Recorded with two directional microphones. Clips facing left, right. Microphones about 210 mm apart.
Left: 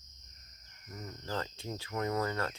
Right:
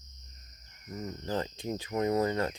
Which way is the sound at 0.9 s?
20° right (ahead or behind).